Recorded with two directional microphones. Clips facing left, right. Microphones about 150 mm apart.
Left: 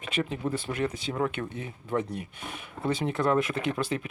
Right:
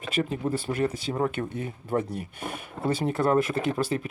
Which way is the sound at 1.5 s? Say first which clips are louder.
Right 3 dB; 45° right (ahead or behind).